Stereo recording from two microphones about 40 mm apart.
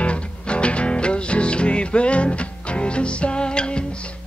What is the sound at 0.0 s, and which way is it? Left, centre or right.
Music, left.